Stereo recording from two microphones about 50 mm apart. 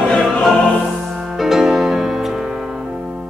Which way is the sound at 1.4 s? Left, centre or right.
Centre.